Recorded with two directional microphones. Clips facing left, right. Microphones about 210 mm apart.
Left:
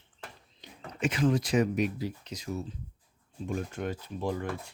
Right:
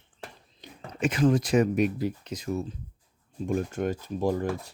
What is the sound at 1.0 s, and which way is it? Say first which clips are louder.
Speech: right 4 dB; 45° right (ahead or behind).